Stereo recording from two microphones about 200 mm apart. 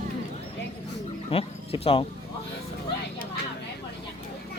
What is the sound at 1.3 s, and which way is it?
Speech, 30° left (ahead or behind).